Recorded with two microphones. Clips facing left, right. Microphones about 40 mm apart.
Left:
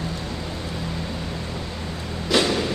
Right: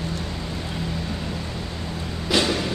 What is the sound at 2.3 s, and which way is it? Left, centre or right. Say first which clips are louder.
Music: left 1 dB; centre.